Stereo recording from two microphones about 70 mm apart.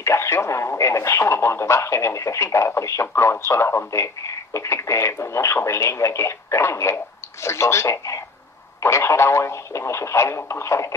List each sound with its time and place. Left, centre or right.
0.0 s speech: left